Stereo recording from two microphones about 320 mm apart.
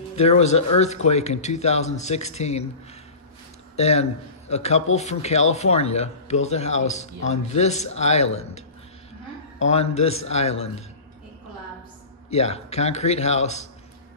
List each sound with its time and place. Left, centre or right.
0.1 s speech: centre
3.7 s a man's voice: centre
12.3 s speech: centre